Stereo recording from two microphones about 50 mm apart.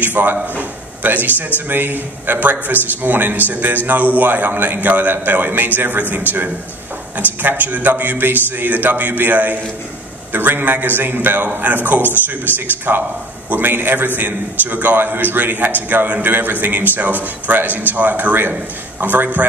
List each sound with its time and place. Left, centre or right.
0.0 s a man's voice: right